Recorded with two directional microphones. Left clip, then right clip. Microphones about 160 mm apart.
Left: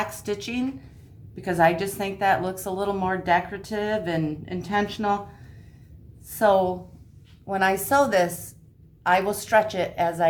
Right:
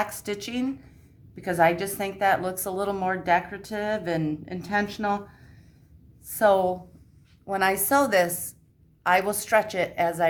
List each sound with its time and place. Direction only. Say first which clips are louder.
0.0 s a woman's voice: left 1 dB; 45° right (ahead or behind)
6.4 s a woman's voice: left 1 dB; 45° right (ahead or behind)